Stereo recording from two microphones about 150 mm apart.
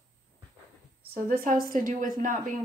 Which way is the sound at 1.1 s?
70° right (ahead or behind).